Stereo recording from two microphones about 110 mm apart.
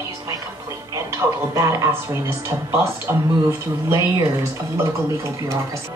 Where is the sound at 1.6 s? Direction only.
25° right (ahead or behind).